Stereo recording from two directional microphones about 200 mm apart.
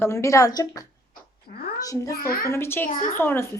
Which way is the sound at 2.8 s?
40° left (ahead or behind).